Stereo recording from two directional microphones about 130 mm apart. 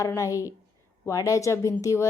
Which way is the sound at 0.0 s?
25° left (ahead or behind).